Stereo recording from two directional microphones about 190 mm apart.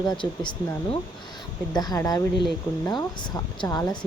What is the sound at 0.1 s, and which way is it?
Speech, 25° left (ahead or behind).